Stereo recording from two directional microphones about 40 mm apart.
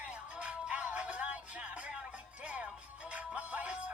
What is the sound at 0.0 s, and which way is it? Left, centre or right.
Music, right.